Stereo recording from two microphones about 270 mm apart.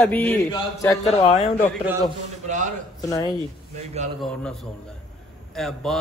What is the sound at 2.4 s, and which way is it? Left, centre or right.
Speech, right.